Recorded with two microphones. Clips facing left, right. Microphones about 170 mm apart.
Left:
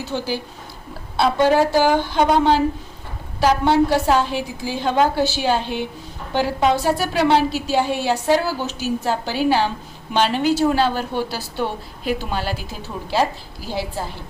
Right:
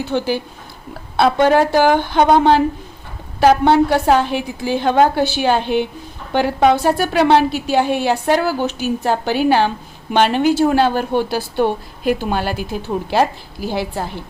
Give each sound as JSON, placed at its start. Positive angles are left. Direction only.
{"t": 0.0, "sound": "a woman's voice", "side_deg": -60}